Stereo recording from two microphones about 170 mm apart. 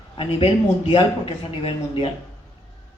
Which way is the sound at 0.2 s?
30° left (ahead or behind).